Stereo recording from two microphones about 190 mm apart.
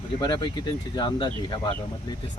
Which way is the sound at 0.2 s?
20° left (ahead or behind).